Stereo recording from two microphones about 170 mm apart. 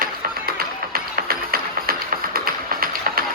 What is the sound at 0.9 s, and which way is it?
Music, 60° right (ahead or behind).